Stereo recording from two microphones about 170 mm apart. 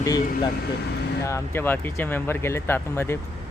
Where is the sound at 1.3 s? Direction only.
15° left (ahead or behind).